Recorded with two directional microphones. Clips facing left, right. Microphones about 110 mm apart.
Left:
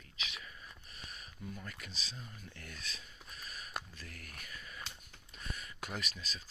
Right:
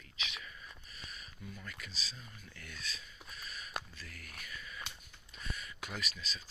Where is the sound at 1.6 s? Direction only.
50° left (ahead or behind).